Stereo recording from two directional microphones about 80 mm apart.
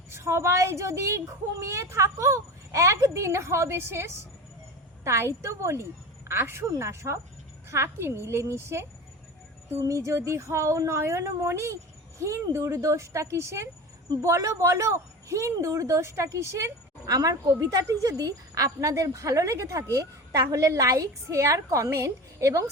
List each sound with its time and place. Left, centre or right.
0.1 s a woman's voice: right